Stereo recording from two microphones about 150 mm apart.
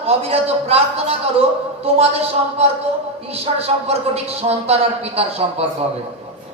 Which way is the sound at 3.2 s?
40° right (ahead or behind).